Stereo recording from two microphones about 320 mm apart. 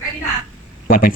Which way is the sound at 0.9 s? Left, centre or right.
Left.